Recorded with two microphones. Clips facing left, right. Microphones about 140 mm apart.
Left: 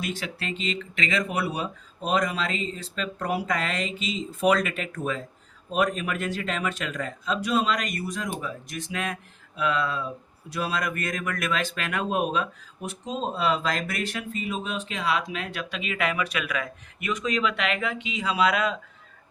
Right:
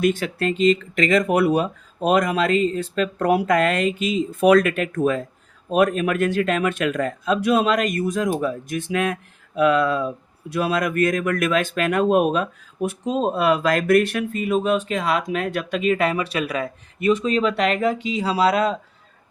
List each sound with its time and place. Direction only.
0.0 s speech: 50° right (ahead or behind); by 18.8 s 35° right (ahead or behind)